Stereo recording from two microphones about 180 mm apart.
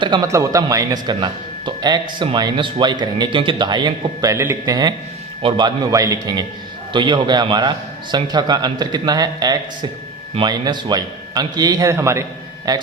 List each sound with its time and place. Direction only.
0.0 s a man's voice: 20° right (ahead or behind)